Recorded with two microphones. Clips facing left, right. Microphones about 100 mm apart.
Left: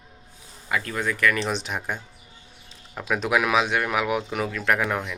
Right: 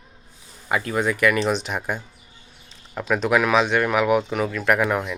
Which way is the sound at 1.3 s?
5° right (ahead or behind).